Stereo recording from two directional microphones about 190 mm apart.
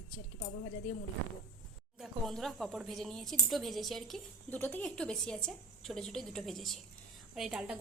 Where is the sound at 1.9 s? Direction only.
Centre (ahead or behind).